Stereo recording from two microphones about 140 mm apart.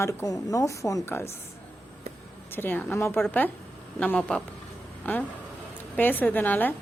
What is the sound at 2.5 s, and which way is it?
A woman's voice, 15° left (ahead or behind).